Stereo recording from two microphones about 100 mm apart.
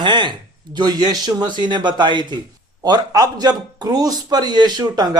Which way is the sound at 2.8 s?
40° right (ahead or behind).